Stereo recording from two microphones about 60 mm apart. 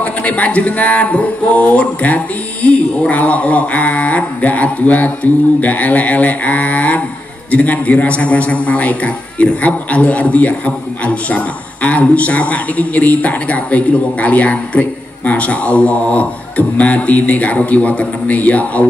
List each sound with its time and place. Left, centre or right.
0.0 s a man's voice: left